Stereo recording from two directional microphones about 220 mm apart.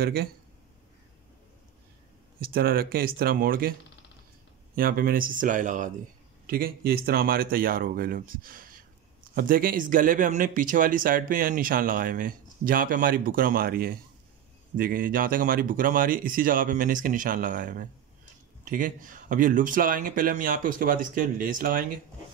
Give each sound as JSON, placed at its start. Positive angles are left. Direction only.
{"t": 0.0, "sound": "speech", "side_deg": -45}
{"t": 2.4, "sound": "speech", "side_deg": -40}
{"t": 4.7, "sound": "speech", "side_deg": -40}